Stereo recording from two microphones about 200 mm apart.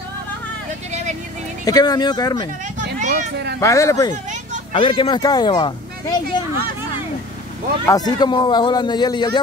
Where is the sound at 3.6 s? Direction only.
15° left (ahead or behind).